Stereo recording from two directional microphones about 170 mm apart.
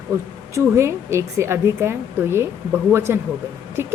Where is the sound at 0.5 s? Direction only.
15° right (ahead or behind).